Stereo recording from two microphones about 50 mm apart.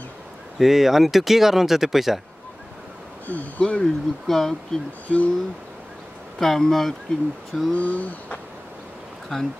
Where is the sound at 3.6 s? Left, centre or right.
Left.